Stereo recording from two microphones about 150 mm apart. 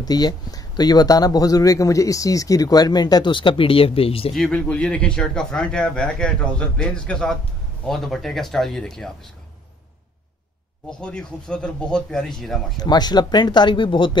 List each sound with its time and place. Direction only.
0.0 s speech: 25° left (ahead or behind)
4.3 s speech: 5° left (ahead or behind)
10.9 s speech: 5° left (ahead or behind)
12.7 s speech: 25° left (ahead or behind)